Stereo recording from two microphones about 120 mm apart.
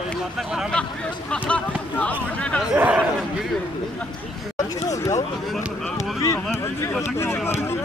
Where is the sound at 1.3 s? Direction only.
10° left (ahead or behind).